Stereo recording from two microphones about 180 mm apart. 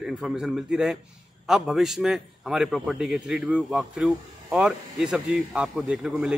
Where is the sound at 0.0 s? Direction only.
5° right (ahead or behind).